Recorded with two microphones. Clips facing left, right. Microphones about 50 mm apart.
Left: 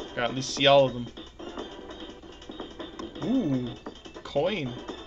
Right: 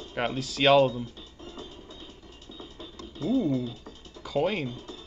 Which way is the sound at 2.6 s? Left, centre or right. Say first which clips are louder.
Left 5 dB; left.